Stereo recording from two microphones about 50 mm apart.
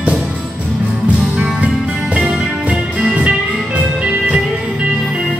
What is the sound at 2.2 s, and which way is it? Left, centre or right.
Music, centre.